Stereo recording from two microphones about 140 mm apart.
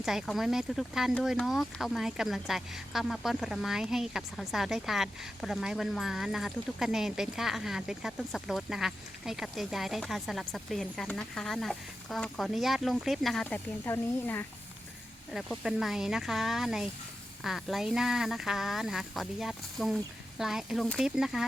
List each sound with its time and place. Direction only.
0.0 s speech: centre (ahead or behind)
13.8 s speech: 15° left (ahead or behind)
15.3 s speech: centre (ahead or behind)